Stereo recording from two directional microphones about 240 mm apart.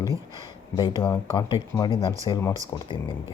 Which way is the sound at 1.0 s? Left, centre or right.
Centre.